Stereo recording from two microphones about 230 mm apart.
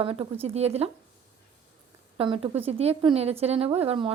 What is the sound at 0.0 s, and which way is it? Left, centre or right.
Speech, right.